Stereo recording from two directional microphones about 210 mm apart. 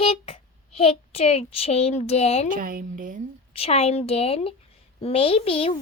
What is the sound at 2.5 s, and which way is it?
Speech, 40° right (ahead or behind).